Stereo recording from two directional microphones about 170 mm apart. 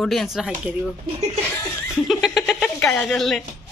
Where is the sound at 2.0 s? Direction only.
Centre (ahead or behind).